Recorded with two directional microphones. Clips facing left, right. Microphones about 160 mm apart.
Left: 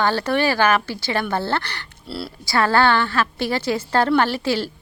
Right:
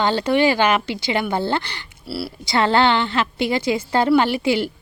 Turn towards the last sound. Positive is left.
turn(degrees=-15)  # may be behind; listen again after turning